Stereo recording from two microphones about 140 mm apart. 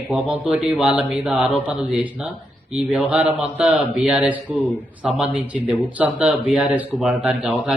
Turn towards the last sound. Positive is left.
turn(degrees=-10)  # may be behind; listen again after turning